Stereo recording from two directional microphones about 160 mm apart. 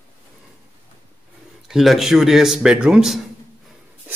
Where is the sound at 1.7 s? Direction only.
Centre (ahead or behind).